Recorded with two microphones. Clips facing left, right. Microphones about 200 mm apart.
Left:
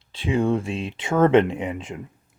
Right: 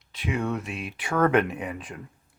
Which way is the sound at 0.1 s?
30° left (ahead or behind).